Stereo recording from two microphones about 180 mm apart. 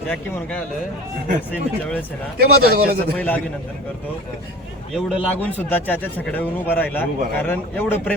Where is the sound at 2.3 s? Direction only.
60° right (ahead or behind).